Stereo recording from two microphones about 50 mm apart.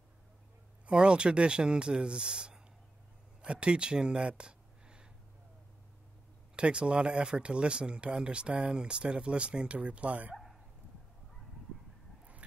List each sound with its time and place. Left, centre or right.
0.8 s speech: centre
6.5 s speech: right
10.3 s dog: centre